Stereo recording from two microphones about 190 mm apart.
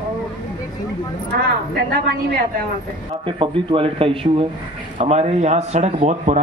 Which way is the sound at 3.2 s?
25° right (ahead or behind).